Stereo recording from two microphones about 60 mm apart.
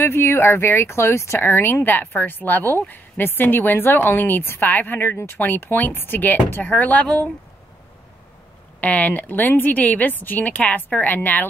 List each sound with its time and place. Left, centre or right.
0.0 s speech: left
1.4 s a woman's voice: left
8.8 s speech: left